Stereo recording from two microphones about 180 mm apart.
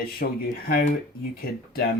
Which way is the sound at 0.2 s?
55° left (ahead or behind).